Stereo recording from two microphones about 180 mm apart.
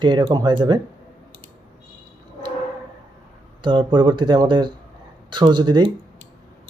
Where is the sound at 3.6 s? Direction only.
25° right (ahead or behind).